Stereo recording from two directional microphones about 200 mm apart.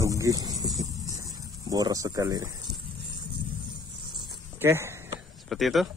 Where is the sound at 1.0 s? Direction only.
15° right (ahead or behind).